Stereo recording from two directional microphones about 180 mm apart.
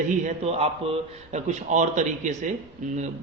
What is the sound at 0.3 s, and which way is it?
A man's voice, 35° right (ahead or behind).